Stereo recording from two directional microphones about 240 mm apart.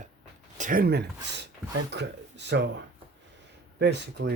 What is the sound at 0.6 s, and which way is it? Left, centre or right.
Speech, right.